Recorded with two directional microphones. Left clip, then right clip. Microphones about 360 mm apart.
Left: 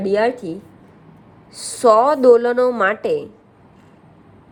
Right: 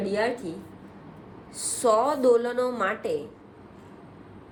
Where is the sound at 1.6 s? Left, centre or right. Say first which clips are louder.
Left 9 dB; left.